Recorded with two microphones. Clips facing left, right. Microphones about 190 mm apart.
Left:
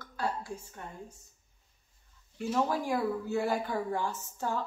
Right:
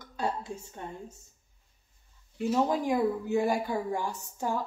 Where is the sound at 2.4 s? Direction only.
15° right (ahead or behind).